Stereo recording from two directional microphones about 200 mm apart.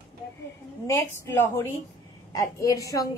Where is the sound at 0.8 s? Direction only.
15° left (ahead or behind).